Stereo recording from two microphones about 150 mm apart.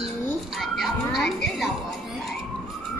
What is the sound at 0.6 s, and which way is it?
Music, centre (ahead or behind).